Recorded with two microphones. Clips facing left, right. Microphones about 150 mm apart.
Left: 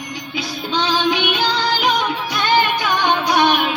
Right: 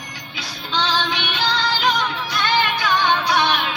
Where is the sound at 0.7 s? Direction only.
10° left (ahead or behind).